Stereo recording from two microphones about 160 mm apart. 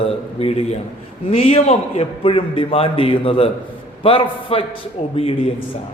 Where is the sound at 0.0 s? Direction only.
40° left (ahead or behind).